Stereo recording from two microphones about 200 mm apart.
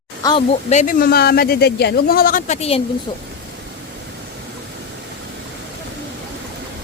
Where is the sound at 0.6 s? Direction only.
40° left (ahead or behind).